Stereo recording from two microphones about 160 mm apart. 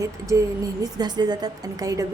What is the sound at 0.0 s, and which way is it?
A woman's voice, 20° right (ahead or behind).